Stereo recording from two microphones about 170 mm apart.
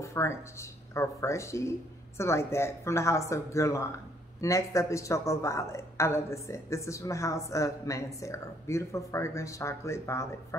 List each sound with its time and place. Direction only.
0.0 s a woman's voice: 15° left (ahead or behind)